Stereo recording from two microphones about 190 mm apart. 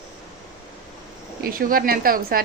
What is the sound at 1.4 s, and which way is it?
A woman's voice, 50° right (ahead or behind).